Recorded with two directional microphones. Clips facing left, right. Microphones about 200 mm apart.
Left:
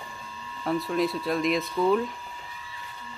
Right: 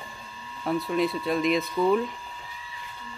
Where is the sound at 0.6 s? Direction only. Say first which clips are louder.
Right 1 dB; centre (ahead or behind).